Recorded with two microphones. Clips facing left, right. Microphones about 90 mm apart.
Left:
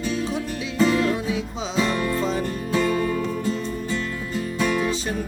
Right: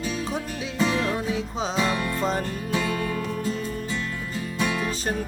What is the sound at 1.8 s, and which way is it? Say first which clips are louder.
Music: left 3 dB; 10° right (ahead or behind).